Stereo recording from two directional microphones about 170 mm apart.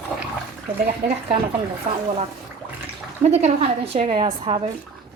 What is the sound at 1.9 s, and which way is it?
Speech, 45° right (ahead or behind).